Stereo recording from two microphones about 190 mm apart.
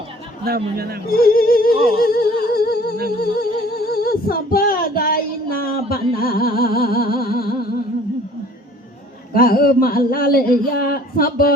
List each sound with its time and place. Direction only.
0.4 s speech: 50° right (ahead or behind)
1.1 s child singing: 50° left (ahead or behind)
9.3 s child singing: 50° left (ahead or behind)